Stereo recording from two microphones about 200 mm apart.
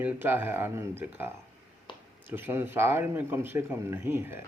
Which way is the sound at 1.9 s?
25° left (ahead or behind).